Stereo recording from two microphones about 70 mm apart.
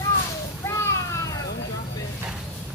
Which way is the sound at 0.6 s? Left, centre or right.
Left.